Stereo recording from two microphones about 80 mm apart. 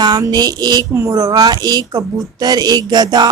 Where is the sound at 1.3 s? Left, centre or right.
Right.